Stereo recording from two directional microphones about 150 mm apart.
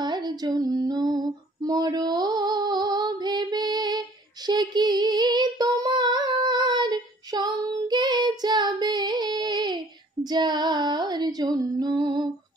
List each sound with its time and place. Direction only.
0.0 s female singing: 30° right (ahead or behind)